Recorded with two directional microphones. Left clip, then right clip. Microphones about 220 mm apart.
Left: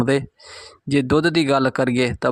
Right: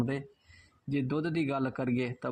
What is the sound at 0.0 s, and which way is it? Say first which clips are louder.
Speech: left 15 dB; 30° left (ahead or behind).